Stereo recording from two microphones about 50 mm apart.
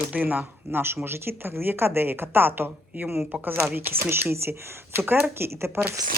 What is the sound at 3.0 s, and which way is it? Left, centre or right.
Speech, centre.